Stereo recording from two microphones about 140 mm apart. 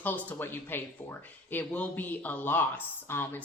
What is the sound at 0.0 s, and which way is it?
Speech, 10° left (ahead or behind).